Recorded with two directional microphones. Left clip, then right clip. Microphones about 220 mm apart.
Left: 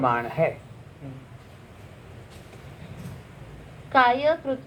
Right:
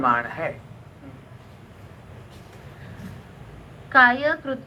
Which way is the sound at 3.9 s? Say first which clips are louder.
Right 3 dB; 50° right (ahead or behind).